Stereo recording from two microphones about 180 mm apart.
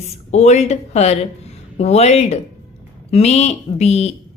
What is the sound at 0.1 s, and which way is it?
Speech, 40° left (ahead or behind).